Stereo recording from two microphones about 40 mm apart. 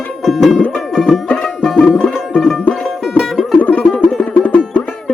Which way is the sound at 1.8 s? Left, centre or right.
Centre.